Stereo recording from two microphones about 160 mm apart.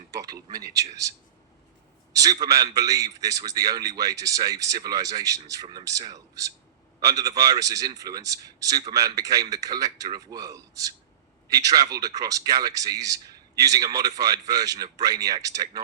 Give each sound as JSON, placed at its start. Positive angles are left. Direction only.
{"t": 0.5, "sound": "a man's voice", "side_deg": -20}